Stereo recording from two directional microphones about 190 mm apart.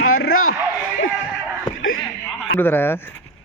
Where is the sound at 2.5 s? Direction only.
10° left (ahead or behind).